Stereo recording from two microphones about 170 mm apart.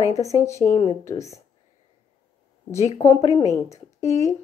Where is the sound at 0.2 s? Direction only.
20° left (ahead or behind).